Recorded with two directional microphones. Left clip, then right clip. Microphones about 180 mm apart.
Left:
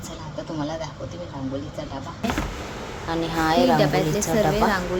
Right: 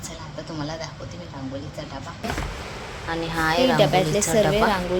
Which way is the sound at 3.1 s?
20° left (ahead or behind).